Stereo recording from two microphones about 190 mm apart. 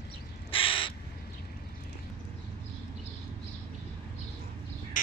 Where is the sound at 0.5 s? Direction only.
30° left (ahead or behind).